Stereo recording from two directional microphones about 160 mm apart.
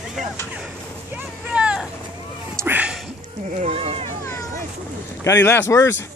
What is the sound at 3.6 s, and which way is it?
Run, 40° right (ahead or behind).